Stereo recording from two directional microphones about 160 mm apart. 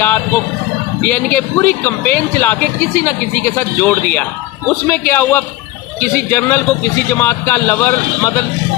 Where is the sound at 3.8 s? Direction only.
10° left (ahead or behind).